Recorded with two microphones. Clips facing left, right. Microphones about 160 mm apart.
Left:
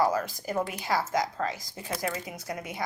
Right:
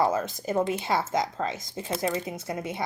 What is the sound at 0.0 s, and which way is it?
Speech, 25° right (ahead or behind).